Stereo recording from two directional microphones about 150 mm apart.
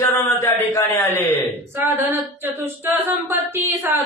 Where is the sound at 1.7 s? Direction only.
15° right (ahead or behind).